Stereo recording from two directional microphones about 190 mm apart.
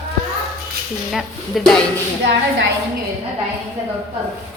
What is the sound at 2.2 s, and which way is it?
Speech, 65° right (ahead or behind).